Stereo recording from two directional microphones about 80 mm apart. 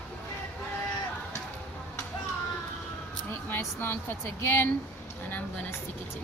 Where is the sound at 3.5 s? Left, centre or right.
Left.